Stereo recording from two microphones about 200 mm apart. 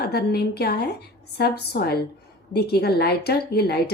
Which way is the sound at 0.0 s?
50° left (ahead or behind).